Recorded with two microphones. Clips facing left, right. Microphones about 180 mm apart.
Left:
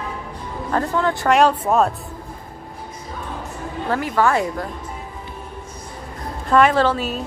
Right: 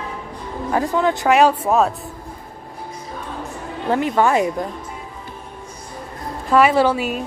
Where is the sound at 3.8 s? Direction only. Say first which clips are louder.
Right 2 dB; 20° right (ahead or behind).